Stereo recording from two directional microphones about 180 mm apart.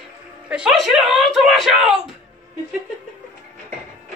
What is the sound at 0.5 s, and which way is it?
Speech, 5° right (ahead or behind).